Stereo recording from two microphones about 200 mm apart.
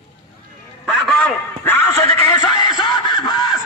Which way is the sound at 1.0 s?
5° left (ahead or behind).